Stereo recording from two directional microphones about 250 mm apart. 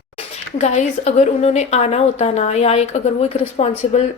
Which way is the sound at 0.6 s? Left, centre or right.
Left.